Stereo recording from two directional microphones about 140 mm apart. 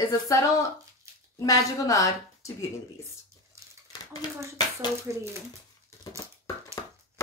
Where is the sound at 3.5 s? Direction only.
20° right (ahead or behind).